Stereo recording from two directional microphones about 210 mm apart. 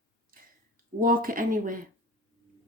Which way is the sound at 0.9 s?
40° right (ahead or behind).